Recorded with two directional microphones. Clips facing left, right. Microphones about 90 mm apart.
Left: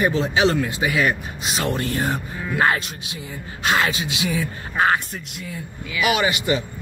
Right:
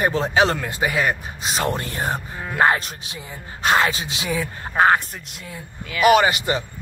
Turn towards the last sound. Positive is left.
turn(degrees=-40)  # may be behind; listen again after turning